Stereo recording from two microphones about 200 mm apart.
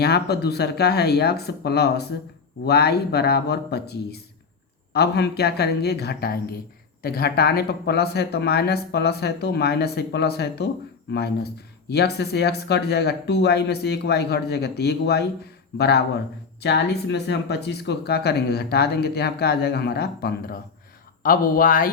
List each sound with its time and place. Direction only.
0.0 s speech: 55° left (ahead or behind)